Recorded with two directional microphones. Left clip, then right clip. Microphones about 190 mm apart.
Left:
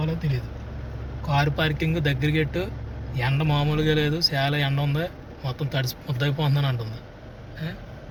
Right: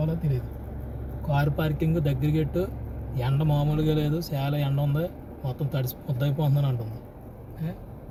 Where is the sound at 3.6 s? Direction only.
5° right (ahead or behind).